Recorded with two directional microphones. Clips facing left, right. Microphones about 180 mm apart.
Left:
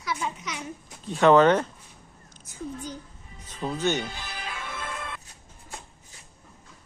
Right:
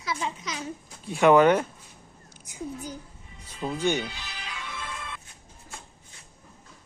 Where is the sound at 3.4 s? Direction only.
10° right (ahead or behind).